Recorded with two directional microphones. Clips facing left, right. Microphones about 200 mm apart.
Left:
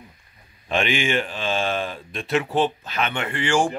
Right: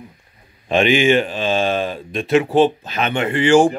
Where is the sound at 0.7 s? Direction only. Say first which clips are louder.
Right 8 dB; 20° right (ahead or behind).